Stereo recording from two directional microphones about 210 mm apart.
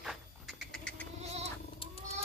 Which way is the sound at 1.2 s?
30° right (ahead or behind).